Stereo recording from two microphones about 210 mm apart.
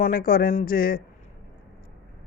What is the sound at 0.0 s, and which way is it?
Speech, 45° left (ahead or behind).